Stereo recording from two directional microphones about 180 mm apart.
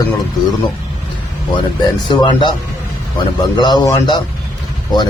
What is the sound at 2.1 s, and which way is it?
Speech, 25° left (ahead or behind).